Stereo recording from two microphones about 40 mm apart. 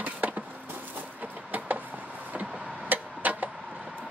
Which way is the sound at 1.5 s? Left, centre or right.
Right.